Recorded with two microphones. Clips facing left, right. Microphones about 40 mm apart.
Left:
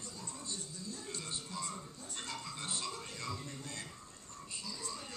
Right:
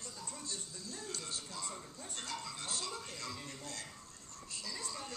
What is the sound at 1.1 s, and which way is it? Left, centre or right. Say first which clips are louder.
Music: left 1 dB; left.